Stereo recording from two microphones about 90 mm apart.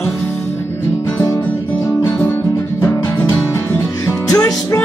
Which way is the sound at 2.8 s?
25° left (ahead or behind).